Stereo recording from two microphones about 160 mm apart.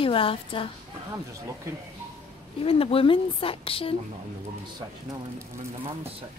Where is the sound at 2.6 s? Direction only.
35° left (ahead or behind).